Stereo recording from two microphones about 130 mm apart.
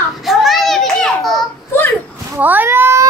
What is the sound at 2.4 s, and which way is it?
Cat, 15° right (ahead or behind).